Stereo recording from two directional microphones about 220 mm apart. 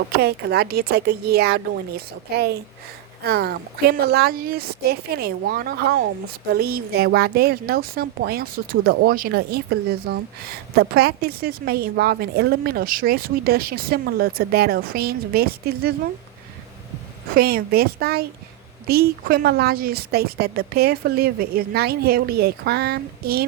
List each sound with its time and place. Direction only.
0.2 s a woman's voice: 45° right (ahead or behind)
17.3 s a woman's voice: 45° right (ahead or behind)